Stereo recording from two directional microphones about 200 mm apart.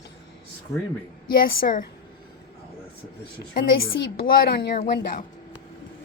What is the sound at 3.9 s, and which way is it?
Speech, 60° left (ahead or behind).